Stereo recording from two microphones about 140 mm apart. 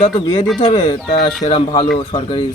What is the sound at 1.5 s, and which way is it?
Speech, 40° left (ahead or behind).